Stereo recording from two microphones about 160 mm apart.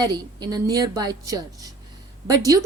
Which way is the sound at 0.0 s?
25° right (ahead or behind).